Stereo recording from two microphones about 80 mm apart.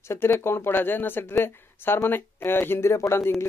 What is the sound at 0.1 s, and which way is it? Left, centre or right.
Speech, left.